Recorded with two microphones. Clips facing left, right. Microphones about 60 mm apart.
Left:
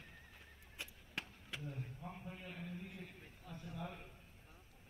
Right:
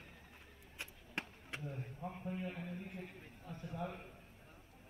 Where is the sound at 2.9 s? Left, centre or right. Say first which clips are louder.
Right 4 dB; right.